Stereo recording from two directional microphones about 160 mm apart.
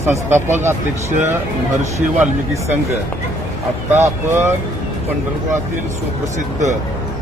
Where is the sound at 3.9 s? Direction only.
15° right (ahead or behind).